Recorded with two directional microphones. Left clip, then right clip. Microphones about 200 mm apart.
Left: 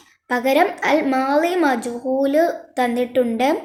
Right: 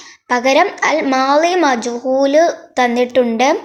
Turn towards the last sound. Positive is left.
turn(degrees=-10)  # may be behind; listen again after turning